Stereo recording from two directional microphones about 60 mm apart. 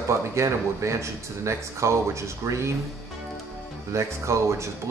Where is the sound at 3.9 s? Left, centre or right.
Right.